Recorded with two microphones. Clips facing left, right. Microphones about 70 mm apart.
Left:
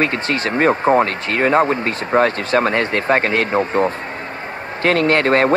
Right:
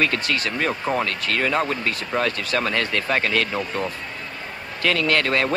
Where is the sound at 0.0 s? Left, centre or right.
Left.